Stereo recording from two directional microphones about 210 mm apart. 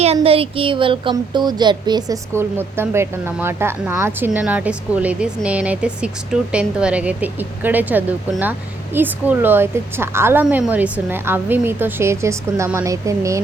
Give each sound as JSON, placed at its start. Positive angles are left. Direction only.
{"t": 0.0, "sound": "a woman's voice", "side_deg": -30}